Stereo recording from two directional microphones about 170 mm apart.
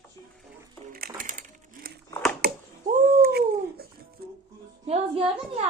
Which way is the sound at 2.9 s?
45° right (ahead or behind).